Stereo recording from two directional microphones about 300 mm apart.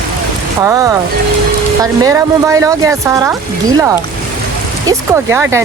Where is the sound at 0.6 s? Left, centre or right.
Centre.